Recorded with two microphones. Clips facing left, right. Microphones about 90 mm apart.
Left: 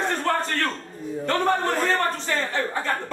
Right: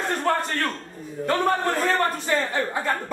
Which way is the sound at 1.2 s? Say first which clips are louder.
Right 1 dB; 5° right (ahead or behind).